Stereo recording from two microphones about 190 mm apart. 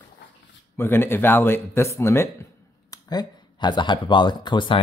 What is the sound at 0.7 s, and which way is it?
Speech, 10° left (ahead or behind).